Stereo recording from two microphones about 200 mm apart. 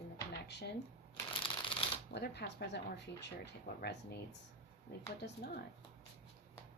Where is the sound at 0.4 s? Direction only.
55° left (ahead or behind).